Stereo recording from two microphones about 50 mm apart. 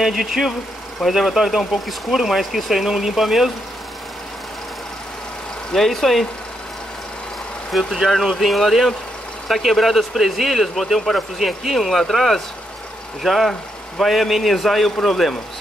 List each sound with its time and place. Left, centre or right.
0.0 s speech: centre
5.7 s speech: centre
7.7 s speech: centre